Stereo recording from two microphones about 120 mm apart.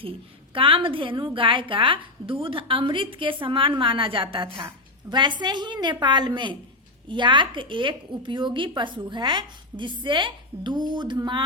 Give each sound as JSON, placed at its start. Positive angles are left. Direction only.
{"t": 0.5, "sound": "a woman's voice", "side_deg": -45}